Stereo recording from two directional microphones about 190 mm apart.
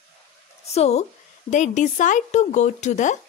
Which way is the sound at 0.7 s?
35° left (ahead or behind).